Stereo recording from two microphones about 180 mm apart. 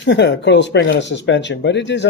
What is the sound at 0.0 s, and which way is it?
Speech, 75° left (ahead or behind).